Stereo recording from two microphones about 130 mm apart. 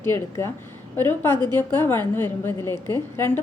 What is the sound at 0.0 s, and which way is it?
A woman's voice, 20° left (ahead or behind).